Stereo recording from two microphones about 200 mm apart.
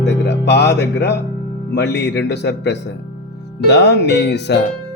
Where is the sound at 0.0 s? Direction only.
60° left (ahead or behind).